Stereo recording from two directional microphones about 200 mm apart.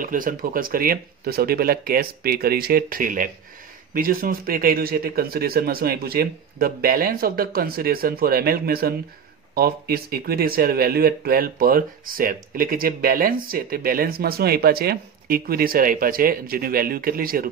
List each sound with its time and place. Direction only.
0.0 s speech: 45° right (ahead or behind)